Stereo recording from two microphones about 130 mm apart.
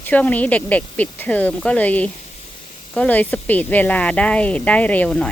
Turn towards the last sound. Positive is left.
turn(degrees=10)  # may be behind; listen again after turning